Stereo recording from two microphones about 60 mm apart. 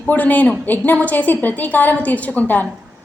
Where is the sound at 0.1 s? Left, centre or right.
Left.